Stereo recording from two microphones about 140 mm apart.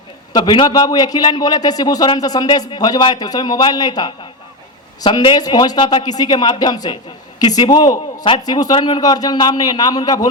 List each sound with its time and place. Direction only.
0.3 s a man's voice: 35° left (ahead or behind)